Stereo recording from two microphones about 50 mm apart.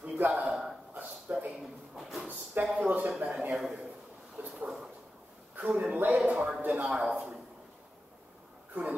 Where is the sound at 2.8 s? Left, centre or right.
Right.